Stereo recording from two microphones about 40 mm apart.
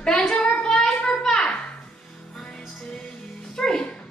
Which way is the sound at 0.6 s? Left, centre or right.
Centre.